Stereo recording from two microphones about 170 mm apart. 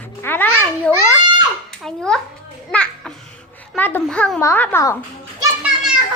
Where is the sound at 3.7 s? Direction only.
10° left (ahead or behind).